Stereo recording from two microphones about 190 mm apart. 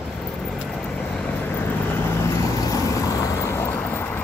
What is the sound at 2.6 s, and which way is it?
Vehicle, 20° left (ahead or behind).